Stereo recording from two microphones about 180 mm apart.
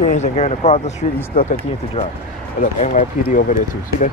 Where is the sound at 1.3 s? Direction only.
50° left (ahead or behind).